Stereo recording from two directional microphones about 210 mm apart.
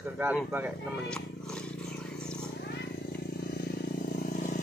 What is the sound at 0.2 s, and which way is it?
Speech, 10° right (ahead or behind).